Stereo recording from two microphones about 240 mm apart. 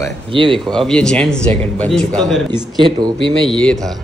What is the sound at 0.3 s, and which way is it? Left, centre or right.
Speech, right.